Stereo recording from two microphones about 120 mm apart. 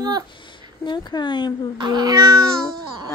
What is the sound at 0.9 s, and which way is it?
Speech, 40° left (ahead or behind).